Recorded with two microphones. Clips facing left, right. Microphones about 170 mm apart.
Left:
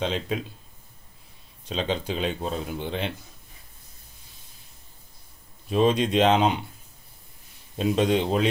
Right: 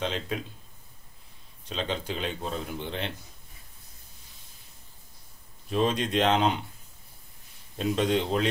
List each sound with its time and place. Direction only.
0.0 s speech: 20° left (ahead or behind)
1.7 s speech: 25° left (ahead or behind)
5.7 s speech: 15° left (ahead or behind)
7.7 s speech: 20° left (ahead or behind)